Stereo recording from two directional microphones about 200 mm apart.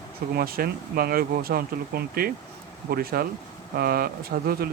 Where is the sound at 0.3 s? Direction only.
50° right (ahead or behind).